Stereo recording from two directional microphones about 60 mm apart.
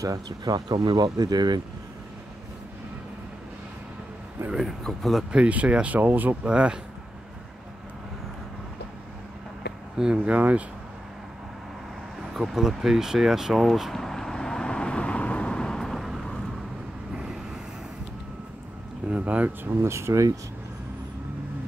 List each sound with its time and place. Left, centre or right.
0.0 s speech: right
4.6 s speech: centre
5.3 s speech: right
6.4 s speech: centre
10.1 s speech: right
12.2 s a sound: centre
19.0 s a sound: right
19.6 s speech: right